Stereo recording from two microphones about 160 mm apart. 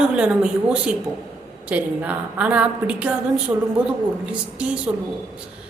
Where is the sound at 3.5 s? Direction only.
20° right (ahead or behind).